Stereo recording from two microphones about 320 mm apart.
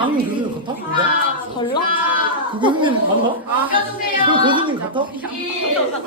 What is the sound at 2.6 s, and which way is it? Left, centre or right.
Speech, centre.